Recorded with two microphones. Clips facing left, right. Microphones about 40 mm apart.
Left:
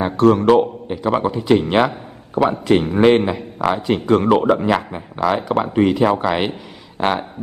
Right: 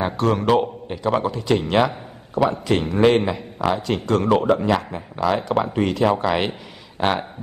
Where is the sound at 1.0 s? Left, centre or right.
Centre.